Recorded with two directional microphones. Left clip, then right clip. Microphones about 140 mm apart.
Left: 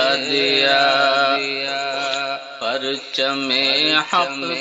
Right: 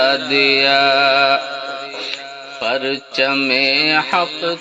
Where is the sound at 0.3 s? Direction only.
20° right (ahead or behind).